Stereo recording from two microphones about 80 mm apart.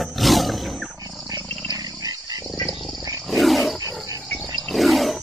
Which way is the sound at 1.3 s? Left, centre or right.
Right.